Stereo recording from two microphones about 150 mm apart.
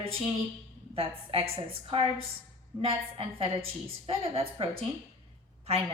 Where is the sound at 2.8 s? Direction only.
40° right (ahead or behind).